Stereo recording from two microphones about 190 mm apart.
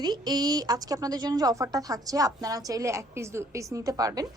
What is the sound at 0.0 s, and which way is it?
A woman's voice, 20° right (ahead or behind).